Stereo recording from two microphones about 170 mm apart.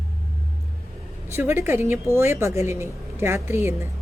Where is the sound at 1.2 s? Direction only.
15° right (ahead or behind).